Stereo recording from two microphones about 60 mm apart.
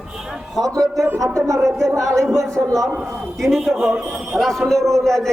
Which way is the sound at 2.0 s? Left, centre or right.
Right.